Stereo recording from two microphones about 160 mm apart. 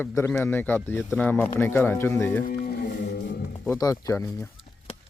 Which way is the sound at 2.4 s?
75° left (ahead or behind).